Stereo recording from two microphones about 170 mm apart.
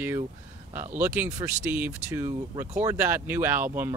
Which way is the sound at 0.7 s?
10° right (ahead or behind).